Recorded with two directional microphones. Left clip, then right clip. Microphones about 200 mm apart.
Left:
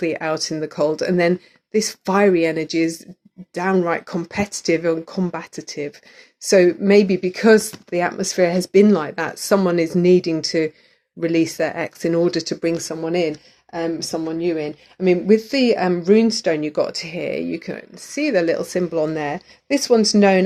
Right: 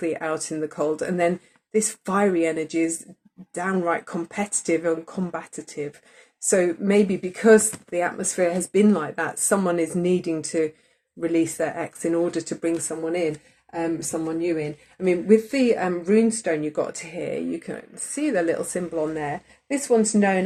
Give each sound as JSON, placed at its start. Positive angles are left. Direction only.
{"t": 0.0, "sound": "speech", "side_deg": 40}